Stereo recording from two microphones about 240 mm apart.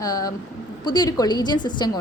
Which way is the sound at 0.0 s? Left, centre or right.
Centre.